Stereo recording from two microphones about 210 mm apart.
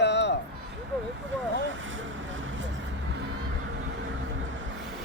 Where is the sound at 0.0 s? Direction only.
55° left (ahead or behind).